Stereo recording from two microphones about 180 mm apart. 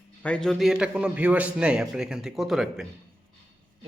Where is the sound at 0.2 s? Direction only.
5° left (ahead or behind).